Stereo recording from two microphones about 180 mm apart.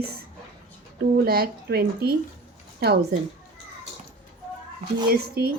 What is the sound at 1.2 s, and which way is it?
A woman's voice, 60° right (ahead or behind).